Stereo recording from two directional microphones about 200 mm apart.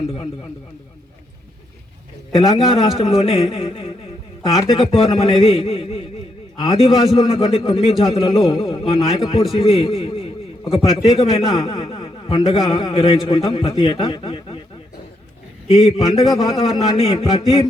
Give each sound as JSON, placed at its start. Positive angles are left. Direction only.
{"t": 2.3, "sound": "a man's voice", "side_deg": 25}
{"t": 15.6, "sound": "a man's voice", "side_deg": 30}